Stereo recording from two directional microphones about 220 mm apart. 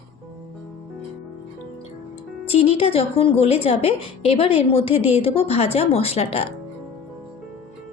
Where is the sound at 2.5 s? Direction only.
25° left (ahead or behind).